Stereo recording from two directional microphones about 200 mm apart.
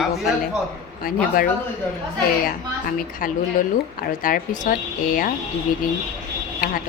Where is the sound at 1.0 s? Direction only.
45° left (ahead or behind).